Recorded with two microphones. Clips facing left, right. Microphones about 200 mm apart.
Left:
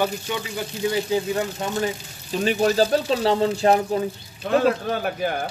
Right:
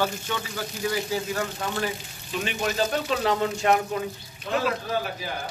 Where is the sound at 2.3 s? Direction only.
35° left (ahead or behind).